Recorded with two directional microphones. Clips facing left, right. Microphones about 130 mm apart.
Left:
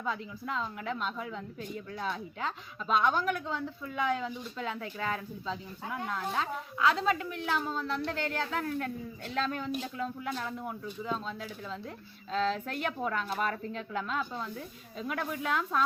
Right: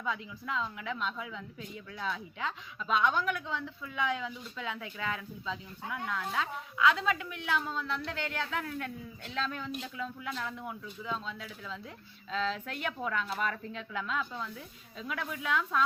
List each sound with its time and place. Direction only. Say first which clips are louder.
0.0 s a woman's voice: left 1 dB; 40° left (ahead or behind)